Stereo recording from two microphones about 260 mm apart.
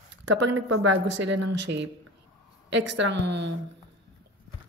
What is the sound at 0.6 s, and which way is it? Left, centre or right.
Speech, right.